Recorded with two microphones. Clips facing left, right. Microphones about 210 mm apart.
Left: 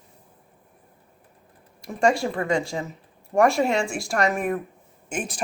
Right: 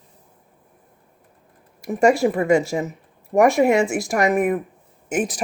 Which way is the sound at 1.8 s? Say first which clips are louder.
Right 5 dB; 20° right (ahead or behind).